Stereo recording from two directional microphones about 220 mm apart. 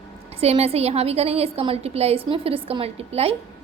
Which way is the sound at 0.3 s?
30° right (ahead or behind).